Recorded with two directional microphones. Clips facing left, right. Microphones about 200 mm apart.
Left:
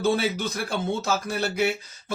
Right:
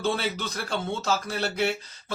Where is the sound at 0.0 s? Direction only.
10° left (ahead or behind).